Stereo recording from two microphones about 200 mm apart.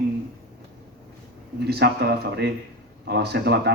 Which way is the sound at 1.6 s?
55° right (ahead or behind).